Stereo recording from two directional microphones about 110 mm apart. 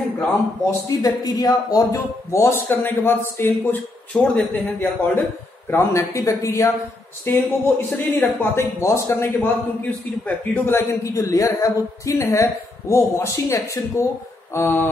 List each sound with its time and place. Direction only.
1.0 s speech: 35° left (ahead or behind); by 14.9 s 20° left (ahead or behind)